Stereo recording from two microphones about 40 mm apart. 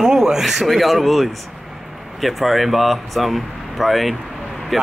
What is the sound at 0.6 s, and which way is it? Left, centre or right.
Speech, centre.